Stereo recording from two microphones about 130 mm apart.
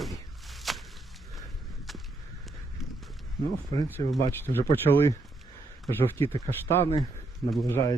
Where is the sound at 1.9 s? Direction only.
Centre (ahead or behind).